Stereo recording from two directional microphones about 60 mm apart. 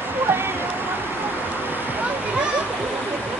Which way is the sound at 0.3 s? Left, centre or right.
Right.